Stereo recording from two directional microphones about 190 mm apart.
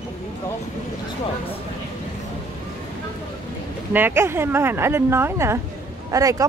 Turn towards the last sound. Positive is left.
turn(degrees=-15)  # may be behind; listen again after turning